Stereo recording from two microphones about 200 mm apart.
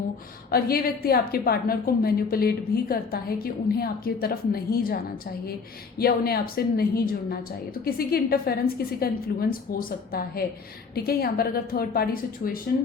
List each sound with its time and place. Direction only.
0.5 s a woman's voice: 50° left (ahead or behind)
6.0 s a woman's voice: 50° left (ahead or behind)